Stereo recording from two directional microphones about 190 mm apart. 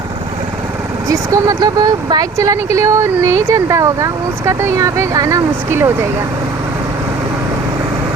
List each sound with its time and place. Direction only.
1.0 s speech: 20° right (ahead or behind)